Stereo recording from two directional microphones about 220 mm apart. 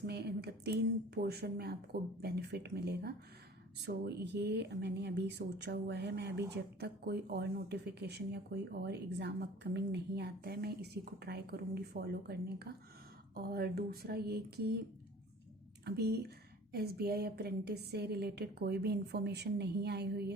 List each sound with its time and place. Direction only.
0.0 s a woman's voice: 50° right (ahead or behind)
15.8 s a woman's voice: 45° right (ahead or behind)